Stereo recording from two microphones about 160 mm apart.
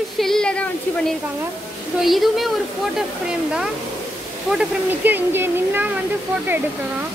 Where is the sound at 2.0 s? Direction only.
Centre (ahead or behind).